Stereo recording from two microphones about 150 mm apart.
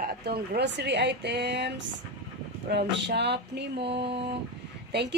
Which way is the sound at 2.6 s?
90° right.